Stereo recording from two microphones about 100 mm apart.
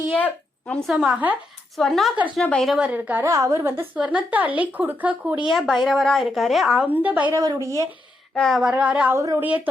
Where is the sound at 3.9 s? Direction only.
15° right (ahead or behind).